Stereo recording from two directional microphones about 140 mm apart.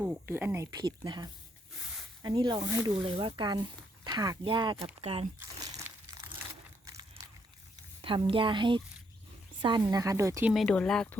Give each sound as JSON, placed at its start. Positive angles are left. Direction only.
{"t": 0.0, "sound": "speech", "side_deg": -10}
{"t": 5.4, "sound": "crumpling", "side_deg": -25}
{"t": 8.0, "sound": "speech", "side_deg": -35}
{"t": 10.5, "sound": "speech", "side_deg": 5}